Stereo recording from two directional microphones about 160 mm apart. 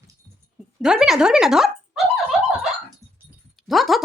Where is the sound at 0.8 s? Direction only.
5° right (ahead or behind).